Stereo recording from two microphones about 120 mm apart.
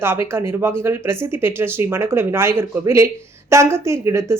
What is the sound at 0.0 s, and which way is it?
Speech, 20° right (ahead or behind).